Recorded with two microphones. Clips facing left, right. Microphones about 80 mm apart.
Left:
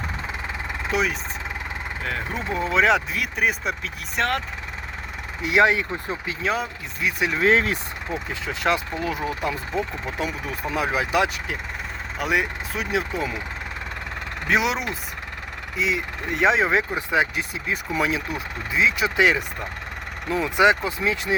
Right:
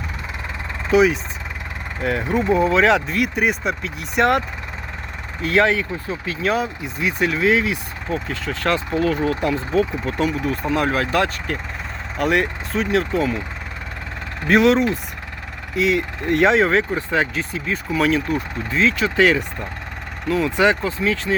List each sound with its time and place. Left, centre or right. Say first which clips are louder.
0.9 s speech: right 9 dB; centre
2.6 s speech: right 4 dB; centre
5.4 s speech: right 1 dB; centre
6.4 s speech: right 5 dB; centre
7.3 s speech: left 1 dB; left
8.1 s speech: right 5 dB; centre
14.4 s speech: right 8 dB; centre